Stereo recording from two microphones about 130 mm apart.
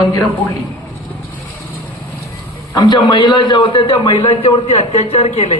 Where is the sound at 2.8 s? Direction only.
35° left (ahead or behind).